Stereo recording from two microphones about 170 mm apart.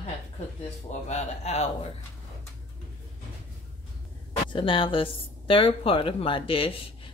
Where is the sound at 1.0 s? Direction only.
40° left (ahead or behind).